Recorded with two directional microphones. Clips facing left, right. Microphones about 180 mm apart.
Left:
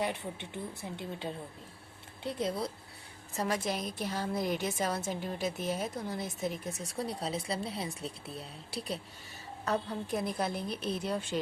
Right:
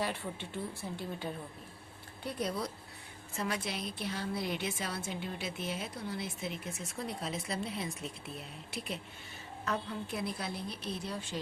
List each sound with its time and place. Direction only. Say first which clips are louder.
0.0 s speech: left 2 dB; 20° left (ahead or behind)
3.3 s a woman's voice: left 4 dB; 40° left (ahead or behind)